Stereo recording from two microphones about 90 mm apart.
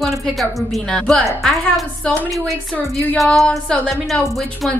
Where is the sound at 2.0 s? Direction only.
20° left (ahead or behind).